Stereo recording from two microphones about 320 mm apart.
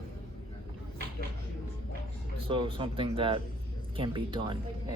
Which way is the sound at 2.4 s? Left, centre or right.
Centre.